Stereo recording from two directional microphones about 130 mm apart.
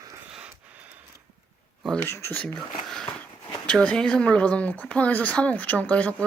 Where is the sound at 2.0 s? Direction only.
20° left (ahead or behind).